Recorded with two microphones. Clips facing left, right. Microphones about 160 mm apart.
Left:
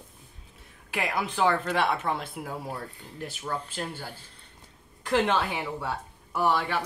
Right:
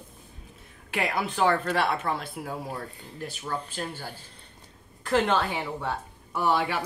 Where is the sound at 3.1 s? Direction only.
20° left (ahead or behind).